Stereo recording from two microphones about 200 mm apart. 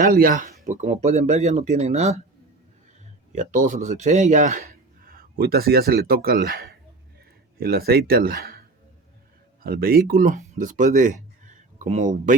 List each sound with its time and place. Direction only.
0.0 s speech: 45° right (ahead or behind)
3.3 s a man's voice: 40° right (ahead or behind)
9.6 s speech: 50° right (ahead or behind)